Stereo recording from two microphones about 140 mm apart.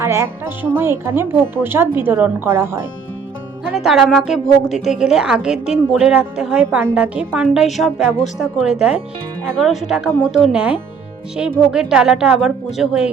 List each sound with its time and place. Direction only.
0.0 s speech: 20° right (ahead or behind)
3.7 s a woman's voice: 5° right (ahead or behind)